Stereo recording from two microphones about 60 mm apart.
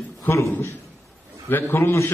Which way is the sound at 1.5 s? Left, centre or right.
Left.